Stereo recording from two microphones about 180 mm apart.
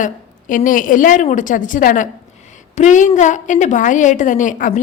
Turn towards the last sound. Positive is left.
turn(degrees=45)  # may be behind; listen again after turning